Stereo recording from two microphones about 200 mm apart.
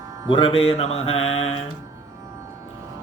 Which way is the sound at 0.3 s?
25° left (ahead or behind).